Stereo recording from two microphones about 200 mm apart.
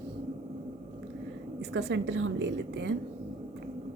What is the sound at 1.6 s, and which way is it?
A woman's voice, 60° right (ahead or behind).